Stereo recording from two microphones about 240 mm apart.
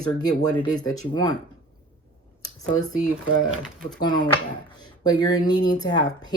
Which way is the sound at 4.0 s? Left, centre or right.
Centre.